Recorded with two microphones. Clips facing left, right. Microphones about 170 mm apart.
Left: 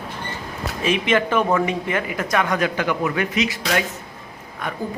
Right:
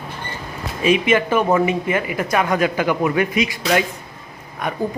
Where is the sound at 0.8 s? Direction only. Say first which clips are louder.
Right 3 dB; 10° right (ahead or behind).